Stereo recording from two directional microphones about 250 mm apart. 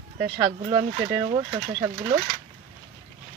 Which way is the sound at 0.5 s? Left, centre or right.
Centre.